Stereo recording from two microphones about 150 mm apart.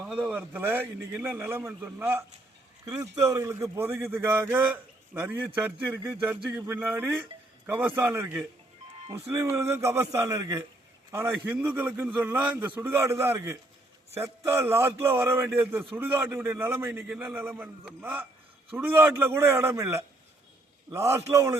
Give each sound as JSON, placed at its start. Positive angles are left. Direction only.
{"t": 0.0, "sound": "a man's voice", "side_deg": -5}